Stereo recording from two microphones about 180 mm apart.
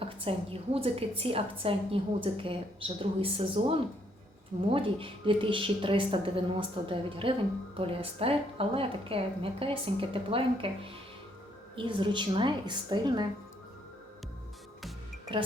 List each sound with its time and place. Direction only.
0.0 s a woman's voice: 30° right (ahead or behind)